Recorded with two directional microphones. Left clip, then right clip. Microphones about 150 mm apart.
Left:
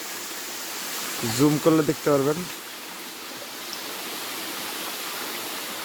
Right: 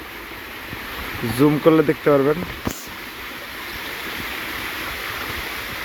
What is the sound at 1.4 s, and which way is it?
Speech, centre (ahead or behind).